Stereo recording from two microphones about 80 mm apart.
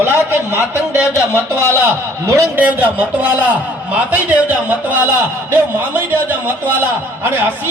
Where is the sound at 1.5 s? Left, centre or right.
Right.